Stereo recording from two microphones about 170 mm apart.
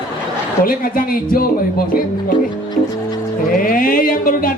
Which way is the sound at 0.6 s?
60° left (ahead or behind).